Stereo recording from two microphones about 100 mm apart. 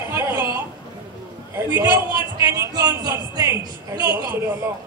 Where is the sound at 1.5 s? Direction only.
25° right (ahead or behind).